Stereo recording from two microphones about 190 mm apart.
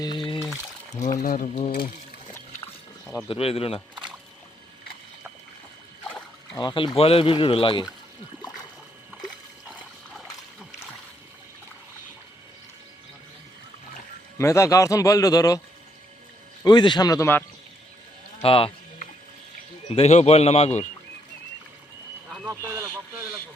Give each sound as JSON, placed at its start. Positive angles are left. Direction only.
{"t": 0.0, "sound": "pour", "side_deg": 25}
{"t": 1.2, "sound": "speech", "side_deg": 45}
{"t": 3.2, "sound": "a man's voice", "side_deg": 30}
{"t": 6.1, "sound": "a sound", "side_deg": 5}
{"t": 6.6, "sound": "speech", "side_deg": 25}
{"t": 14.3, "sound": "a man's voice", "side_deg": 15}
{"t": 16.6, "sound": "speech", "side_deg": 25}
{"t": 18.4, "sound": "speech", "side_deg": 30}
{"t": 20.0, "sound": "a man's voice", "side_deg": 35}
{"t": 22.4, "sound": "speech", "side_deg": -15}